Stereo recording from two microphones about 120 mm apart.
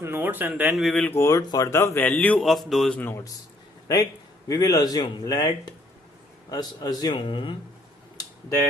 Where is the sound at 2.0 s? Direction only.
15° left (ahead or behind).